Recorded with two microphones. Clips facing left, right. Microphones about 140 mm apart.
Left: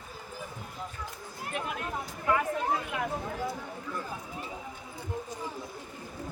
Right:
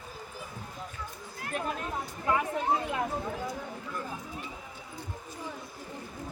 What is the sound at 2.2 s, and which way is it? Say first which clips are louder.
Chatter: even; 25° right (ahead or behind).